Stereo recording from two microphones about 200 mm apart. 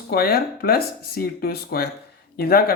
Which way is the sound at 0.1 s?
50° left (ahead or behind).